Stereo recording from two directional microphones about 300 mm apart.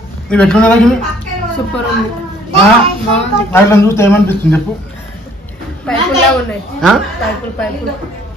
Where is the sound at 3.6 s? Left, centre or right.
Centre.